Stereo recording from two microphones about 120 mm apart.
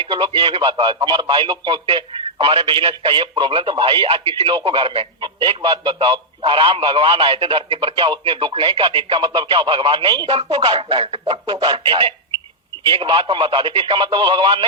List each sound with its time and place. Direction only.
0.1 s a man's voice: 40° right (ahead or behind)
11.5 s a man's voice: 40° right (ahead or behind)